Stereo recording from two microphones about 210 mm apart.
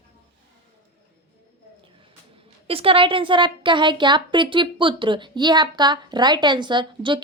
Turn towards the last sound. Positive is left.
turn(degrees=-20)  # may be behind; listen again after turning